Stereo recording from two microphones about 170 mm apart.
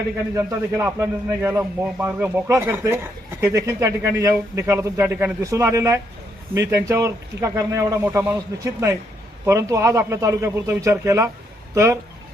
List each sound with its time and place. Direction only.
0.3 s a man's voice: 15° right (ahead or behind)